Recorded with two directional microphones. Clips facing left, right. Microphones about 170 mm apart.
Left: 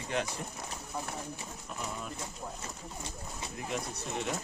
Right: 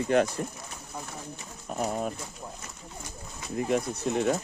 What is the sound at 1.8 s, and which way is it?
Speech, 55° right (ahead or behind).